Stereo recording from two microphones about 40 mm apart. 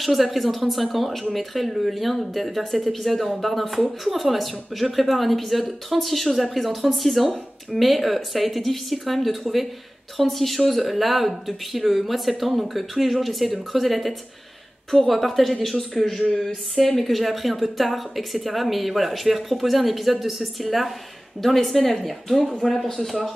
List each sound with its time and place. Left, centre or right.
0.0 s speech: centre